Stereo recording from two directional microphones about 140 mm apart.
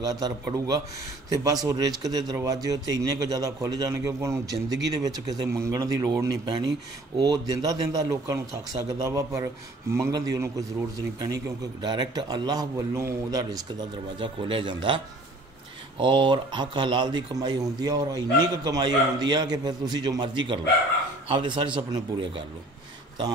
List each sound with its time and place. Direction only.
0.0 s a man's voice: 25° right (ahead or behind)
16.0 s speech: 35° right (ahead or behind)